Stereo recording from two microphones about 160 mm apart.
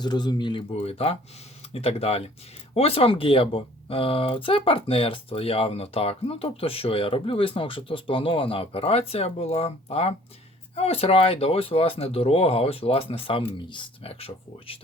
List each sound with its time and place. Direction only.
0.0 s speech: 25° left (ahead or behind)